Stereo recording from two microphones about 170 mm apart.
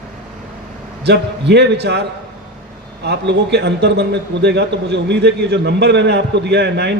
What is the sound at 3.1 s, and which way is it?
A man's voice, 85° right.